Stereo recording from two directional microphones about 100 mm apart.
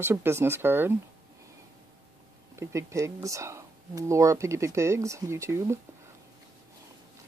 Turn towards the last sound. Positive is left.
turn(degrees=-30)  # may be behind; listen again after turning